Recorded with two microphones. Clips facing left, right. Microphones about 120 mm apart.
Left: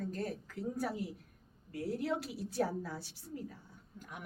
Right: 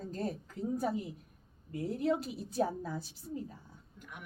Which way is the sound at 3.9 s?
40° left (ahead or behind).